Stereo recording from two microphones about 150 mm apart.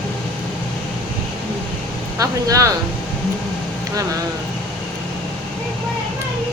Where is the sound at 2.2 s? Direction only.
20° right (ahead or behind).